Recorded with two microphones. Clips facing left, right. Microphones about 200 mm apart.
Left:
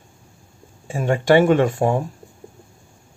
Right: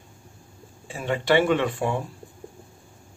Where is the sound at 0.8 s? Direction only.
45° left (ahead or behind).